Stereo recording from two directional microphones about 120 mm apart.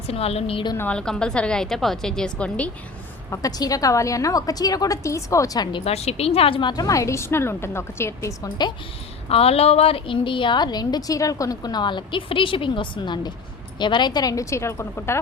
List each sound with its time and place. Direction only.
0.1 s a woman's voice: 55° left (ahead or behind)
0.8 s a woman's voice: 10° left (ahead or behind)
3.2 s a woman's voice: 25° left (ahead or behind)
5.8 s a woman's voice: 60° left (ahead or behind); by 8.7 s 35° left (ahead or behind)
9.3 s a woman's voice: 55° left (ahead or behind); by 15.2 s 20° left (ahead or behind)